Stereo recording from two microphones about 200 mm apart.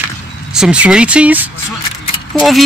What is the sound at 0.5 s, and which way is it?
Speech, 5° right (ahead or behind).